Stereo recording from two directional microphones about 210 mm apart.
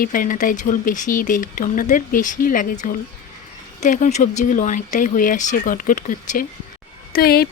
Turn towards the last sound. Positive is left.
turn(degrees=45)  # may be behind; listen again after turning